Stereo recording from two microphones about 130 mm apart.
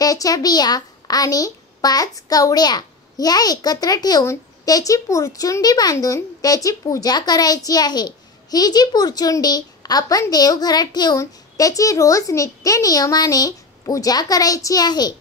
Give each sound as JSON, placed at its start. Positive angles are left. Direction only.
{"t": 0.0, "sound": "a woman's voice", "side_deg": 25}